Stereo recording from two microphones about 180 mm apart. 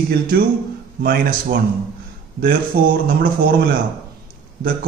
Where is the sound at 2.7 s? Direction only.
50° right (ahead or behind).